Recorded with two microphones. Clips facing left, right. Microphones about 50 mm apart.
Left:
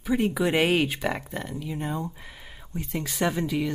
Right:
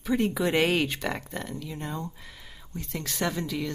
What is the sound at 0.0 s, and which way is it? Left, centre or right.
Speech, centre.